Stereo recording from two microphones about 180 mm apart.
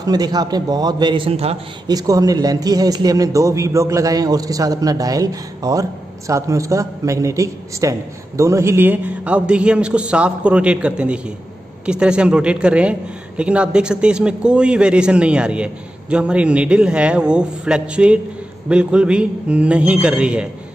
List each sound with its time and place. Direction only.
0.0 s a man's voice: 20° right (ahead or behind)
1.9 s a man's voice: 20° right (ahead or behind)